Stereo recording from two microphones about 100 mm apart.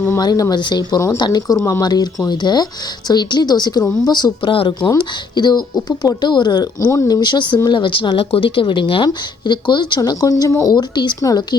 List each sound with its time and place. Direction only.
0.2 s a woman's voice: 40° left (ahead or behind)
4.5 s speech: 65° left (ahead or behind)
4.9 s a woman's voice: 45° left (ahead or behind)
11.2 s speech: 35° left (ahead or behind)